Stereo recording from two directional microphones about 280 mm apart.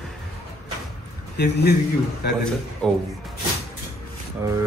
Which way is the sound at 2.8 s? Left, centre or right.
Centre.